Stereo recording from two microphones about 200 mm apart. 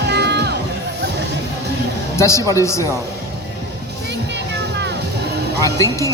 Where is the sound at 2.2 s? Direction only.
15° left (ahead or behind).